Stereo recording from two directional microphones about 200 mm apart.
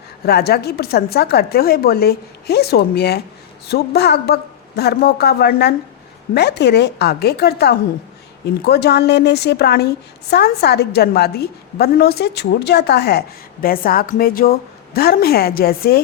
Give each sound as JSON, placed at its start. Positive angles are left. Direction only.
{"t": 0.3, "sound": "a woman's voice", "side_deg": 55}